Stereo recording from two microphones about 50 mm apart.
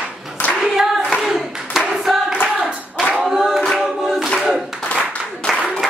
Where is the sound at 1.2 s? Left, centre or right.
Centre.